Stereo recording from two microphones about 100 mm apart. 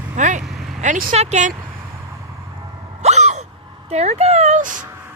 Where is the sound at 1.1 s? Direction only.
90° right.